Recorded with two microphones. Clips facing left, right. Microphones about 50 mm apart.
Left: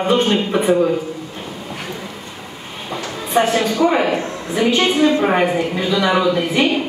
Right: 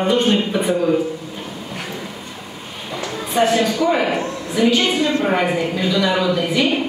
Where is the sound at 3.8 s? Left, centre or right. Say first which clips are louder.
Left 4 dB; centre.